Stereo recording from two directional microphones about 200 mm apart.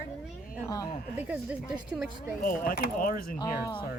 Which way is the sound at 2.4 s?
45° left (ahead or behind).